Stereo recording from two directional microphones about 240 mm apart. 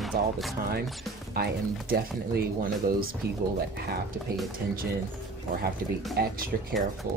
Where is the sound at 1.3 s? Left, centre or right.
Right.